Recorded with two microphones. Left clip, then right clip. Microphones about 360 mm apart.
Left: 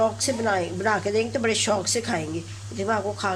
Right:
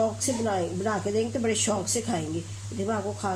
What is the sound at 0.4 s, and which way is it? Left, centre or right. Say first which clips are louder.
Speech: left 5 dB; left.